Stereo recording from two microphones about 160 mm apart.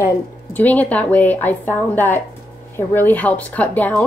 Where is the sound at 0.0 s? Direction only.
10° left (ahead or behind).